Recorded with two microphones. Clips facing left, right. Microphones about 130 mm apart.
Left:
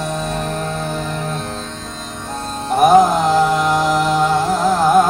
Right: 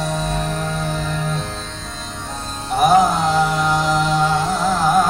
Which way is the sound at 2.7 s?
55° left (ahead or behind).